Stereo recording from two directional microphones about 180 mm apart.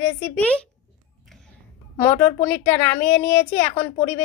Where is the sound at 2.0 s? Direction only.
10° left (ahead or behind).